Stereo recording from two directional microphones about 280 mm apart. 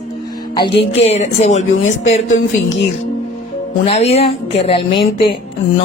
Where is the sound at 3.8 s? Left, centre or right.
Left.